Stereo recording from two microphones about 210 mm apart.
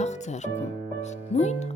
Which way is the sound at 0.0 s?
35° left (ahead or behind).